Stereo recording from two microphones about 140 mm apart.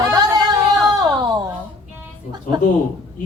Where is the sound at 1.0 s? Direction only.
30° right (ahead or behind).